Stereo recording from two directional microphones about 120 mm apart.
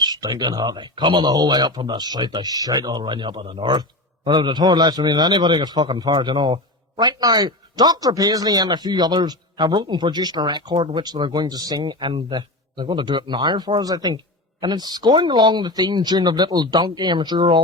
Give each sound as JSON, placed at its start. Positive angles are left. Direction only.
{"t": 0.0, "sound": "speech", "side_deg": -35}